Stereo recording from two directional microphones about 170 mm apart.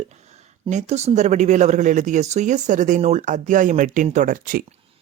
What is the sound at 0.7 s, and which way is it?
Speech, 40° right (ahead or behind).